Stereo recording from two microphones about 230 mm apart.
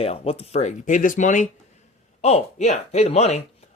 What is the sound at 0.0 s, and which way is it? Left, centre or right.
Speech, left.